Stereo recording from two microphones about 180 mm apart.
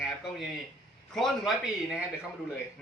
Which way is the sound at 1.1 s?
Centre (ahead or behind).